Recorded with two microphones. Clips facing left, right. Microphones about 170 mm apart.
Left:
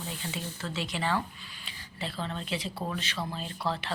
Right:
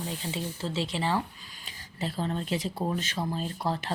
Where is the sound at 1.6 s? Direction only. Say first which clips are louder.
Right 4 dB; 45° right (ahead or behind).